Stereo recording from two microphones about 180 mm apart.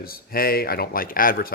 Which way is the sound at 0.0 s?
55° left (ahead or behind).